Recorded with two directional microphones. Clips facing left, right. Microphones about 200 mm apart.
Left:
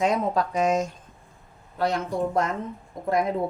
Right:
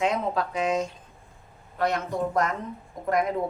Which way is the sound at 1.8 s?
30° left (ahead or behind).